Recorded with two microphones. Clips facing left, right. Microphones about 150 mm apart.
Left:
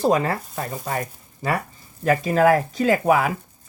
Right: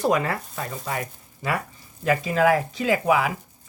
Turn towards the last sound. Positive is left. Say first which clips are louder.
# left 3 dB
turn(degrees=45)  # may be behind; listen again after turning